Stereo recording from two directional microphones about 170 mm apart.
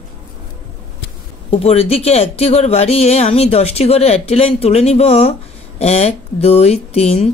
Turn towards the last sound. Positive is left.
turn(degrees=40)  # may be behind; listen again after turning